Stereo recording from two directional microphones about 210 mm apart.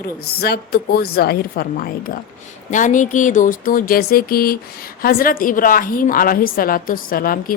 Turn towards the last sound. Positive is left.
turn(degrees=45)  # may be behind; listen again after turning